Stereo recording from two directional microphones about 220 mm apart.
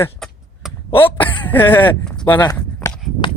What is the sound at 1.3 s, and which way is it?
Speech, 10° left (ahead or behind).